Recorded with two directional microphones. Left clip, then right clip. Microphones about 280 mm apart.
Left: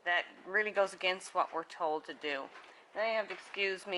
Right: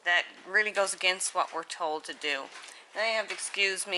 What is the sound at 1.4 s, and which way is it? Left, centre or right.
Speech, centre.